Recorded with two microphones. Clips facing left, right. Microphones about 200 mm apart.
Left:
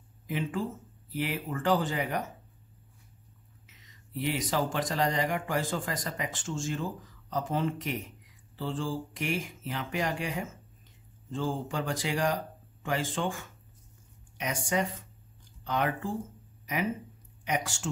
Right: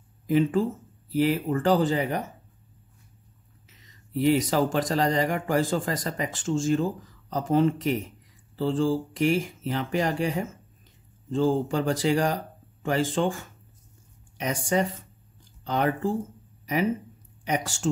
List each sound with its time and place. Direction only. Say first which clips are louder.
0.3 s a man's voice: right 10 dB; 40° right (ahead or behind)
4.1 s a man's voice: right 9 dB; 40° right (ahead or behind)
14.4 s a man's voice: right 5 dB; 35° right (ahead or behind)
17.5 s a man's voice: right 4 dB; 40° right (ahead or behind)